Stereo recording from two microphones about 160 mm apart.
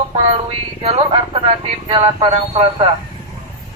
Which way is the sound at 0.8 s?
35° right (ahead or behind).